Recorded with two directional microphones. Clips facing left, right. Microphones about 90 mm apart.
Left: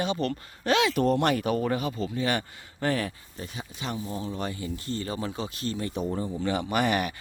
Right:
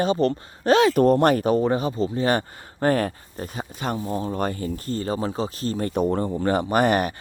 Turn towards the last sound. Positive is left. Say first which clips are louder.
# right 6 dB
turn(degrees=-40)  # may be behind; listen again after turning